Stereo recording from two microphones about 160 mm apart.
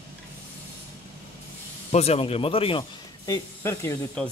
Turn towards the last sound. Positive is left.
turn(degrees=20)  # may be behind; listen again after turning